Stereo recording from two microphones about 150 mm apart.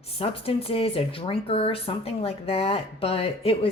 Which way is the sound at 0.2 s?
40° left (ahead or behind).